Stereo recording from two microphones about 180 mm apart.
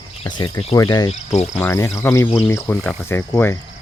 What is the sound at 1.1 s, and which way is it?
Speech, 40° left (ahead or behind).